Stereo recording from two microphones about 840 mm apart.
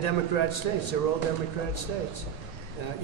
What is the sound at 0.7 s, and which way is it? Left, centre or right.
Speech, left.